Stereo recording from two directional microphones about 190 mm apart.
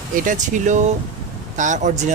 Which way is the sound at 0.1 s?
45° right (ahead or behind).